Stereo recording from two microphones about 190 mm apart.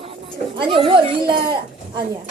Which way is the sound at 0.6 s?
25° right (ahead or behind).